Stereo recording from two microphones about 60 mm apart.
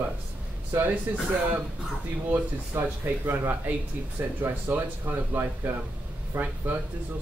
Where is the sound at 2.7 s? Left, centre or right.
Right.